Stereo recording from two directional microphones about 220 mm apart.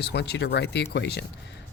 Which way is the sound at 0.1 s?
50° left (ahead or behind).